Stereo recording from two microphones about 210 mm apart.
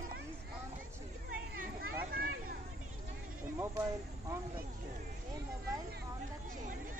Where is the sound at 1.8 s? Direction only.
45° right (ahead or behind).